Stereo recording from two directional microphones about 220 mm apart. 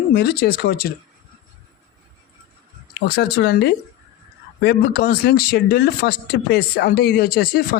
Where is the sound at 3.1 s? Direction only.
50° left (ahead or behind).